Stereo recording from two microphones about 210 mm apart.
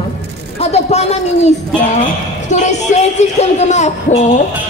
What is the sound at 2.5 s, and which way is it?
A man's voice, 35° left (ahead or behind).